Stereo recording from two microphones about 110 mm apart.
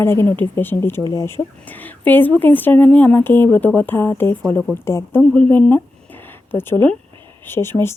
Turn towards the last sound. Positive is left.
turn(degrees=20)  # may be behind; listen again after turning